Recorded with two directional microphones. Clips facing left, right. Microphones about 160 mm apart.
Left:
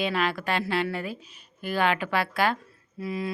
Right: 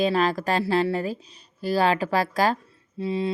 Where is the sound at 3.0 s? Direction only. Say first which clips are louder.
Right 5 dB; 30° right (ahead or behind).